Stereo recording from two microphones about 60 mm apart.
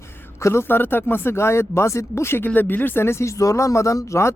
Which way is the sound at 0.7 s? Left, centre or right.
Left.